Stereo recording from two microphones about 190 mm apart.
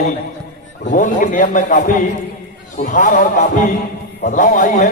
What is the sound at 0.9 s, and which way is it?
A man's voice, 45° left (ahead or behind).